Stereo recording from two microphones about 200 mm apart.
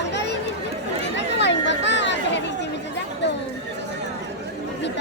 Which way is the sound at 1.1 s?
60° left (ahead or behind).